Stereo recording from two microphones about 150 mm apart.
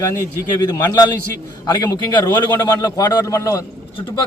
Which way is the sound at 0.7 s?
25° left (ahead or behind).